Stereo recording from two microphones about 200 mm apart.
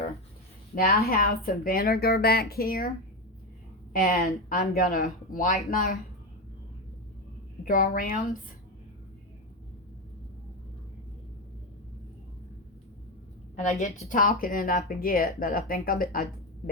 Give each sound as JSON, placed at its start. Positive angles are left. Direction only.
{"t": 0.8, "sound": "a woman's voice", "side_deg": 50}
{"t": 3.9, "sound": "a woman's voice", "side_deg": 50}
{"t": 7.6, "sound": "a woman's voice", "side_deg": 40}
{"t": 13.6, "sound": "a woman's voice", "side_deg": 35}